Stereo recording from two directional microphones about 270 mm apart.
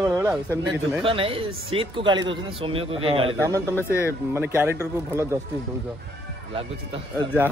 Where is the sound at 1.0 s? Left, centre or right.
Centre.